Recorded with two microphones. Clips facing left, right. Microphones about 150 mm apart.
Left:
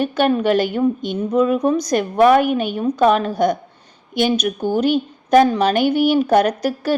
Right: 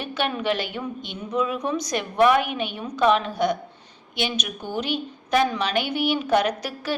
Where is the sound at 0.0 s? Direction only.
45° left (ahead or behind).